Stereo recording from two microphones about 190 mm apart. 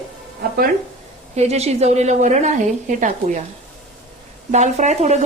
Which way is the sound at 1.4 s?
35° right (ahead or behind).